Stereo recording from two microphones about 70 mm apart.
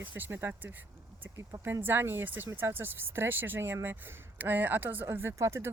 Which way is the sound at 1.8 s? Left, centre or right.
Right.